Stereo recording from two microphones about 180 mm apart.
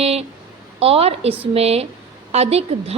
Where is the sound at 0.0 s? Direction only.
35° right (ahead or behind).